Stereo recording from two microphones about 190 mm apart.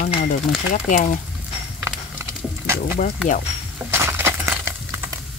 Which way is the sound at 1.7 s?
5° right (ahead or behind).